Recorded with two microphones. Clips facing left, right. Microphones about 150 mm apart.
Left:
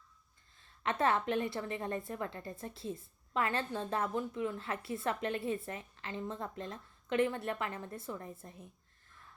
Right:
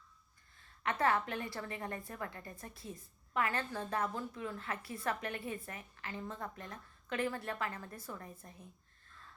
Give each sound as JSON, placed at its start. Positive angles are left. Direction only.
{"t": 0.5, "sound": "a woman's voice", "side_deg": 25}